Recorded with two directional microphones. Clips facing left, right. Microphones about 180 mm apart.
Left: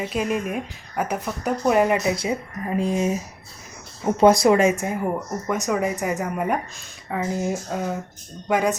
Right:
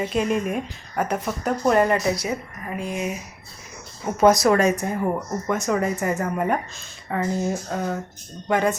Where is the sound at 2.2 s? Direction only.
25° left (ahead or behind).